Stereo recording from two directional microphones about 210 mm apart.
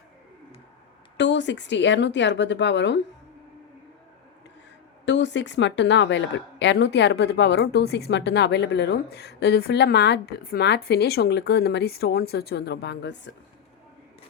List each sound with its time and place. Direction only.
1.1 s speech: 55° left (ahead or behind)
5.0 s a woman's voice: 55° left (ahead or behind)